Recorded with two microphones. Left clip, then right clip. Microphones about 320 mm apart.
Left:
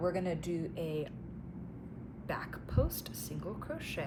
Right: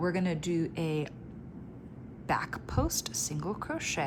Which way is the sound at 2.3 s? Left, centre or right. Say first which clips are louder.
Right 8 dB; centre.